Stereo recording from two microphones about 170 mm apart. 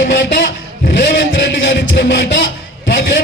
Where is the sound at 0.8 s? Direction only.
75° left (ahead or behind).